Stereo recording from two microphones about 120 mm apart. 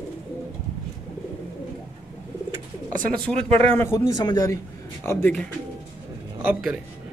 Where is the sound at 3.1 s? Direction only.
10° left (ahead or behind).